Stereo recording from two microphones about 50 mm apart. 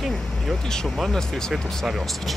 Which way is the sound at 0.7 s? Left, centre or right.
Centre.